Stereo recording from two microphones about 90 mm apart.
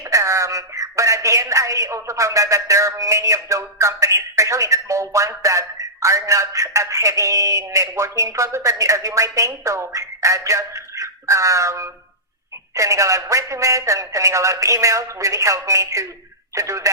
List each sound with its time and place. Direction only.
0.0 s speech: 35° right (ahead or behind)